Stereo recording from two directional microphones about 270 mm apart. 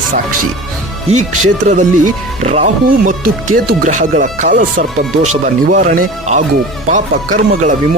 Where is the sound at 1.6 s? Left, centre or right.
Right.